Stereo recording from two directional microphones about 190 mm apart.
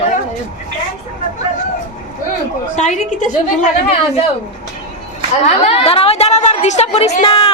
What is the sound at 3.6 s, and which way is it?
Speech, 30° left (ahead or behind).